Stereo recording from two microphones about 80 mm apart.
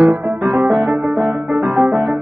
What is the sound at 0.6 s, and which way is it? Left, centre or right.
Music, right.